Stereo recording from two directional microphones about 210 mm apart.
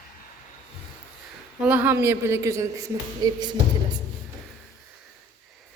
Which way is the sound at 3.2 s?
20° right (ahead or behind).